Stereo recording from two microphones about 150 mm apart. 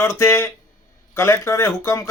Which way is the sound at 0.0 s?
15° left (ahead or behind).